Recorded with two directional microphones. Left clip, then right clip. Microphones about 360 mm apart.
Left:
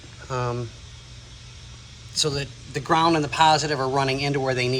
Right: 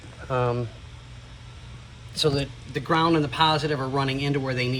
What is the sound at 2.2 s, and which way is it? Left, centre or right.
Speech, left.